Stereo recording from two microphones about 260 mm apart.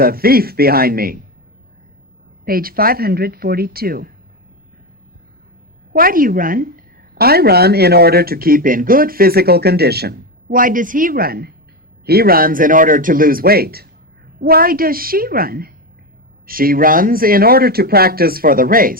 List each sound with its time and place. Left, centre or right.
0.0 s speech: right
2.4 s speech: right
5.9 s speech: right